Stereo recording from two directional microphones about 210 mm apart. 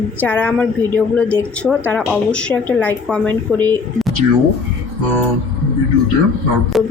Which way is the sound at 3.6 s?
20° right (ahead or behind).